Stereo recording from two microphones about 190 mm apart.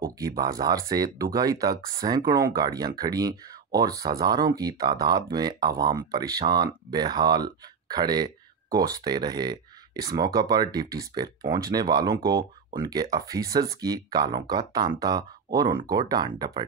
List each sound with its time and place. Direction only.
0.4 s speech: 20° right (ahead or behind)